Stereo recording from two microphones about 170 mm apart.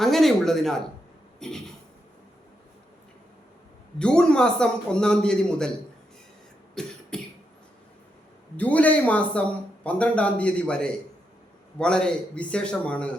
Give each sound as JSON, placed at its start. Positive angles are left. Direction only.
{"t": 0.0, "sound": "a man's voice", "side_deg": 0}
{"t": 1.4, "sound": "a sound", "side_deg": 5}
{"t": 3.9, "sound": "a man's voice", "side_deg": 5}
{"t": 6.8, "sound": "a man's voice", "side_deg": 5}
{"t": 7.1, "sound": "beatboxing", "side_deg": 5}
{"t": 8.5, "sound": "speech", "side_deg": 10}